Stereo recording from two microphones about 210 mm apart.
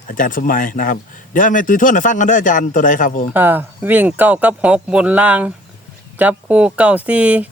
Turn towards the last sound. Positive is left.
turn(degrees=-5)  # may be behind; listen again after turning